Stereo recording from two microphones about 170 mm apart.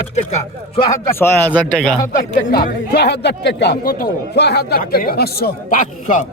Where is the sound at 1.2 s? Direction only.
10° left (ahead or behind).